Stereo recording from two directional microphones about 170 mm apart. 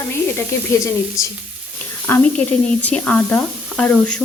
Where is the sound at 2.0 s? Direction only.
10° left (ahead or behind).